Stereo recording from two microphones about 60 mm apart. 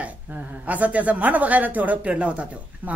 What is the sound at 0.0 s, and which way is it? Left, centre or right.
Speech, right.